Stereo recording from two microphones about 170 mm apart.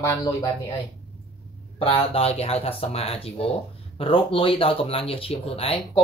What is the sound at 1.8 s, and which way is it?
Speech, 35° left (ahead or behind).